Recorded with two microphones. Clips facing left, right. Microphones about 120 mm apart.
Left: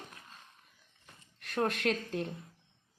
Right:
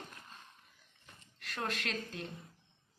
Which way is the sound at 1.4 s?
55° left (ahead or behind).